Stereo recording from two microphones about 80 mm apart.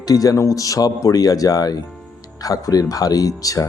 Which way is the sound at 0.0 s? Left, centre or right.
Left.